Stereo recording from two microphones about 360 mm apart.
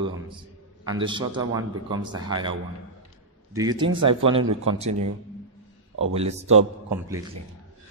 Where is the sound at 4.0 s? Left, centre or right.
Right.